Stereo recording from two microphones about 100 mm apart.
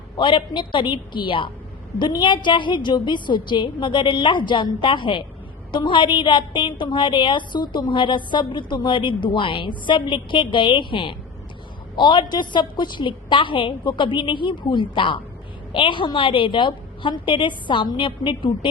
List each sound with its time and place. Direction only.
0.2 s a woman's voice: 55° left (ahead or behind)